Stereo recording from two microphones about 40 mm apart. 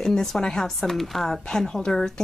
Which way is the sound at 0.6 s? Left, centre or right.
Centre.